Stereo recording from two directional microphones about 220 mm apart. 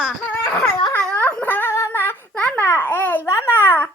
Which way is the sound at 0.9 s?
10° left (ahead or behind).